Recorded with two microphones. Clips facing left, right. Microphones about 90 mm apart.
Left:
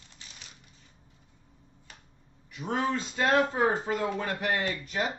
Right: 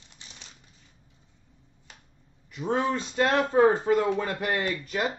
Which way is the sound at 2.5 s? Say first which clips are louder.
Right 3 dB; 35° right (ahead or behind).